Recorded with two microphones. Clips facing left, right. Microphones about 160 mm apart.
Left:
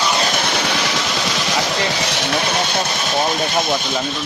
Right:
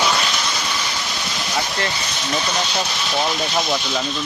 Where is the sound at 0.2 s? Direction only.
50° left (ahead or behind); by 1.5 s 90° left.